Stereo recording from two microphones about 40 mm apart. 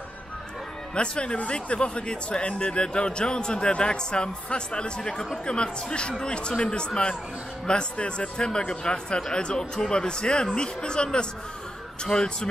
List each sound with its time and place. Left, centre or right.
0.9 s speech: left
5.1 s speech: centre
5.4 s speech: left